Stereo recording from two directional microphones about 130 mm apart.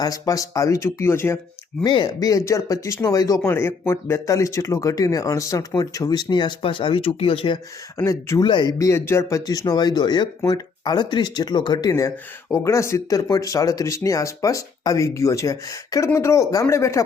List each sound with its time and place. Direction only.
0.0 s speech: 25° left (ahead or behind)
1.8 s speech: 35° left (ahead or behind)
7.9 s speech: 20° left (ahead or behind)
8.4 s speech: 35° left (ahead or behind)
8.8 s speech: 20° left (ahead or behind)